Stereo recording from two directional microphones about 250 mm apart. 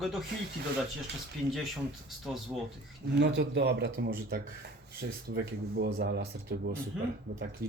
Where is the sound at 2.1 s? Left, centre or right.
Centre.